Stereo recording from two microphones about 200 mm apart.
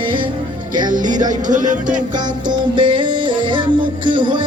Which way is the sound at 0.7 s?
40° right (ahead or behind).